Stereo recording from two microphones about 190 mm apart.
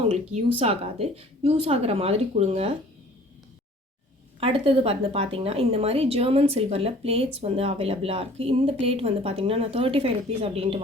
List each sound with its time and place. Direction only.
0.1 s a woman's voice: 35° right (ahead or behind)
4.4 s a woman's voice: 30° right (ahead or behind)